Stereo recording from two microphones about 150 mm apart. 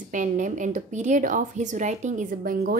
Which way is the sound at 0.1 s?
55° right (ahead or behind).